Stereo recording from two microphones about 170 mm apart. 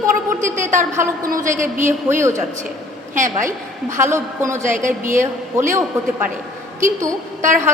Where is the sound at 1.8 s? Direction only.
15° right (ahead or behind).